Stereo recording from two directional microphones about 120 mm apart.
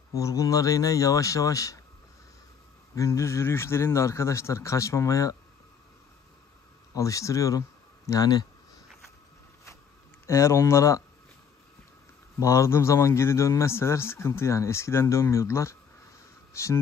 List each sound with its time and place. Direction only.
0.1 s a man's voice: 25° left (ahead or behind)
3.0 s a man's voice: 25° left (ahead or behind)
6.9 s a man's voice: 25° left (ahead or behind)
10.2 s a man's voice: 25° left (ahead or behind)
12.4 s a man's voice: 25° left (ahead or behind)